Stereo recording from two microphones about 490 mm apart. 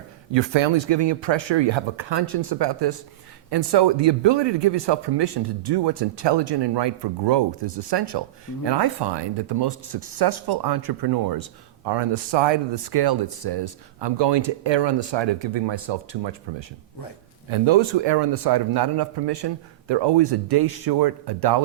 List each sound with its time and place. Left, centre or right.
0.3 s a man's voice: right
11.9 s speech: right
17.5 s a man's voice: right